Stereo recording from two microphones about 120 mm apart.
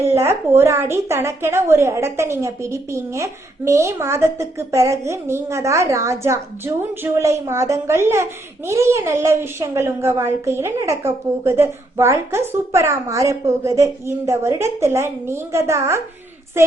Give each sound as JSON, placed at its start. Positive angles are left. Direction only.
{"t": 0.0, "sound": "a woman's voice", "side_deg": -20}